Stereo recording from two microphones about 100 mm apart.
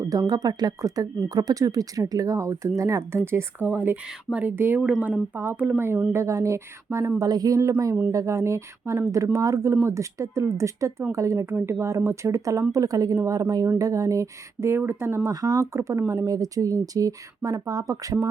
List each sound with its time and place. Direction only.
0.1 s speech: 40° right (ahead or behind); by 4.8 s 20° right (ahead or behind)
4.8 s speech: 10° right (ahead or behind); by 15.3 s 25° right (ahead or behind)
15.3 s speech: 40° right (ahead or behind)